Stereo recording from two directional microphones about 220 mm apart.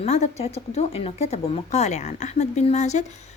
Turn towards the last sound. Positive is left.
turn(degrees=30)  # may be behind; listen again after turning